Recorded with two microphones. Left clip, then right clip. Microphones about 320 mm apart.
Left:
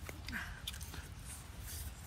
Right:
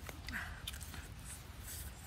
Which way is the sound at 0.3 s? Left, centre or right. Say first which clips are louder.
Even; centre.